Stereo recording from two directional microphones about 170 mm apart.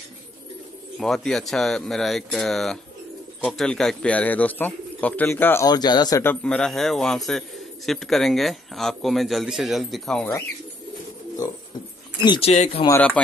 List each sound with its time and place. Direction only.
0.9 s a man's voice: centre (ahead or behind); by 6.3 s 20° left (ahead or behind)
6.4 s a man's voice: 5° left (ahead or behind)
12.2 s speech: 30° left (ahead or behind)